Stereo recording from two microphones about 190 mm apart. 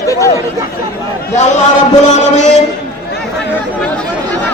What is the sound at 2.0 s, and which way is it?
Speech, 40° left (ahead or behind).